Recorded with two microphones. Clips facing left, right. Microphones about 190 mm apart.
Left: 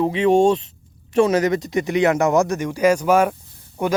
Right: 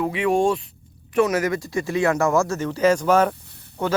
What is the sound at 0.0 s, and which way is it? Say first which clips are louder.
Speech: left 4 dB; 25° left (ahead or behind).